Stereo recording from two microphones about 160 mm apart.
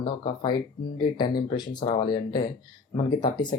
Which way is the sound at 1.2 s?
25° left (ahead or behind).